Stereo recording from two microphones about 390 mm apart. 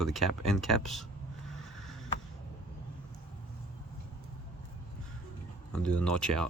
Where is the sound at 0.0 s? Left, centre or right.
Centre.